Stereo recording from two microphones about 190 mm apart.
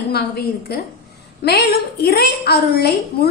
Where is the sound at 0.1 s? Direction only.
55° left (ahead or behind).